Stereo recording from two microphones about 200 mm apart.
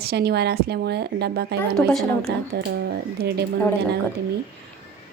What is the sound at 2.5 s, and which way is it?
Speech, 55° right (ahead or behind).